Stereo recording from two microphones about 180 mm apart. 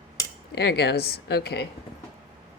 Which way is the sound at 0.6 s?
65° left (ahead or behind).